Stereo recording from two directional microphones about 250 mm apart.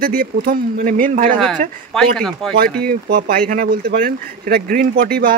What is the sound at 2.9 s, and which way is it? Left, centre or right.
Speech, right.